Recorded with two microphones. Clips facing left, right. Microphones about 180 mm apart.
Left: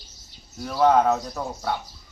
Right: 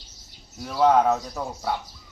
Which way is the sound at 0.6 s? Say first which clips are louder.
Even; centre (ahead or behind).